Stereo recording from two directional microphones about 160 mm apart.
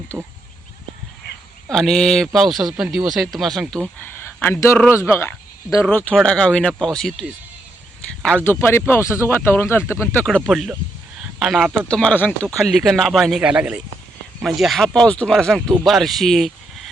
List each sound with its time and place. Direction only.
0.1 s speech: 5° right (ahead or behind)
1.7 s speech: 5° left (ahead or behind)
8.4 s speech: 15° left (ahead or behind)
10.2 s speech: centre (ahead or behind)